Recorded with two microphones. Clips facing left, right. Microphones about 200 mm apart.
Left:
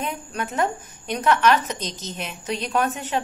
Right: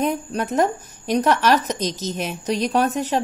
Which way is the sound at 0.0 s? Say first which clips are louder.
Right 7 dB; 40° right (ahead or behind).